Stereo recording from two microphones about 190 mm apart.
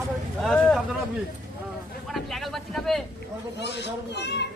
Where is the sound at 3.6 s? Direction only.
65° left (ahead or behind).